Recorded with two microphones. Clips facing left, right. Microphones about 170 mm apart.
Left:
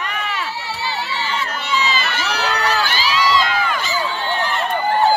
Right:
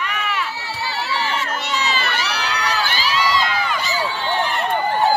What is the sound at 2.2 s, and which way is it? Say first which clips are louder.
Crowd: left 3 dB; 50° left (ahead or behind).